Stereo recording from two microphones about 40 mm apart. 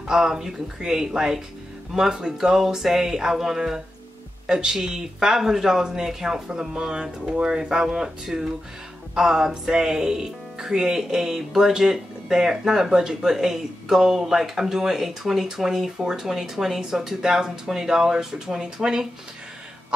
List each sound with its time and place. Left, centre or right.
0.1 s speech: centre